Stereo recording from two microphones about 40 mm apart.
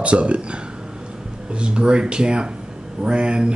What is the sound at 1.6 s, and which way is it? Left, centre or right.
Speech, right.